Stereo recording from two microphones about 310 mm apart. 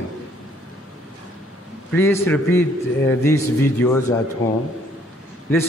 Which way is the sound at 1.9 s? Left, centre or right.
Centre.